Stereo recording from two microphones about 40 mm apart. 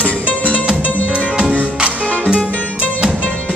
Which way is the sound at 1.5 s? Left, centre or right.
Right.